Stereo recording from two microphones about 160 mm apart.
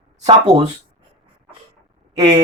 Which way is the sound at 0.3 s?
35° right (ahead or behind).